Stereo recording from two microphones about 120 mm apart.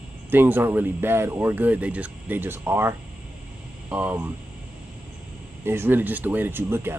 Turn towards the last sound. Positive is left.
turn(degrees=-20)  # may be behind; listen again after turning